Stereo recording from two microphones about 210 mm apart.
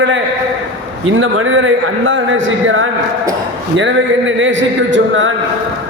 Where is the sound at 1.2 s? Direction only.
70° right (ahead or behind).